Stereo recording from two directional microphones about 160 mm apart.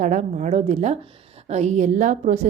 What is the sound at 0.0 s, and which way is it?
A woman's voice, 50° right (ahead or behind).